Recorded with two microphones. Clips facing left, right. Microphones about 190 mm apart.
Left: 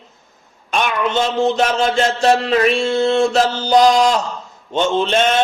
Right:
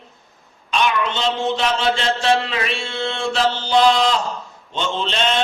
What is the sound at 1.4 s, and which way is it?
A man's voice, 45° left (ahead or behind).